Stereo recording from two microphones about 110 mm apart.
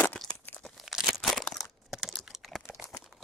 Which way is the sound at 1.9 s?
5° right (ahead or behind).